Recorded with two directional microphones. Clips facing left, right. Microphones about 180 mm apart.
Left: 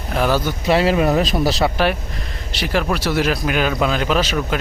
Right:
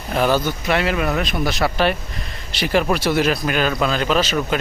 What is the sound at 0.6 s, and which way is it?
Speech, 30° left (ahead or behind).